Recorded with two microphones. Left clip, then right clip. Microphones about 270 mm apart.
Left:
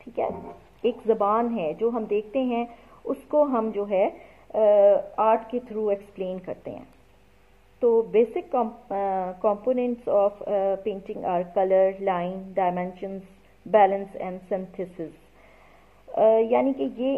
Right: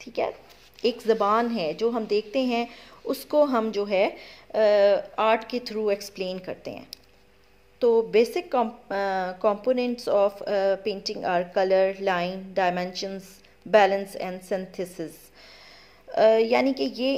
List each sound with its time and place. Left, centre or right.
0.0 s a woman's voice: right
7.8 s a woman's voice: right
16.1 s a woman's voice: right